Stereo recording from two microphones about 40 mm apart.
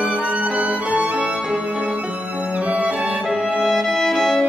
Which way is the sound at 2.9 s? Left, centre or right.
Centre.